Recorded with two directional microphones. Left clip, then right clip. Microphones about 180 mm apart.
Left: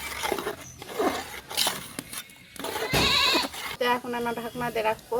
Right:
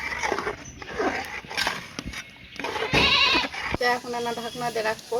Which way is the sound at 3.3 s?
10° left (ahead or behind).